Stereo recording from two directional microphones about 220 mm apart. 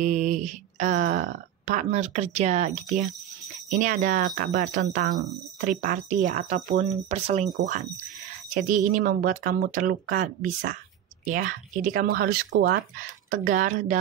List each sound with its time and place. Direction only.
0.0 s speech: 35° right (ahead or behind)
8.5 s speech: 35° right (ahead or behind)